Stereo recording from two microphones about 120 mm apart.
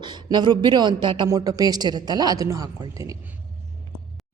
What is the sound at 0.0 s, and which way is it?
A woman's voice, 40° right (ahead or behind).